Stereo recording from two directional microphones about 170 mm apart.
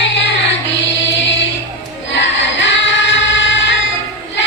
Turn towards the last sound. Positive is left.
turn(degrees=90)